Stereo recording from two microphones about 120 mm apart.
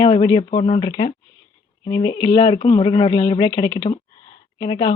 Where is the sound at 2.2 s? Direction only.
55° left (ahead or behind).